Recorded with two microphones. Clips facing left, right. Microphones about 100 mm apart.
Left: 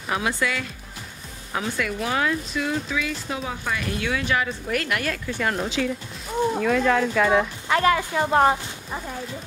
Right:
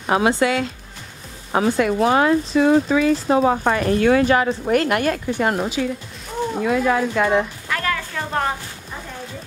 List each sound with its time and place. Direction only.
0.0 s speech: 40° right (ahead or behind)
0.3 s speech: 25° right (ahead or behind)
1.5 s speech: 40° right (ahead or behind)
6.5 s speech: 5° right (ahead or behind)
7.6 s speech: 20° left (ahead or behind)